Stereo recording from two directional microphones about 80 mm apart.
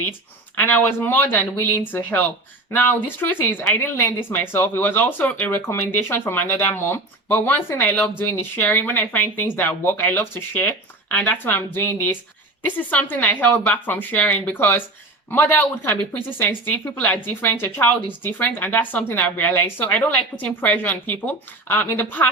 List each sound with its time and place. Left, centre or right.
0.5 s speech: left